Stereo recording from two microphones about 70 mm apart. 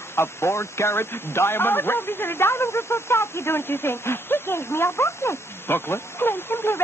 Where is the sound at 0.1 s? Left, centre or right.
Left.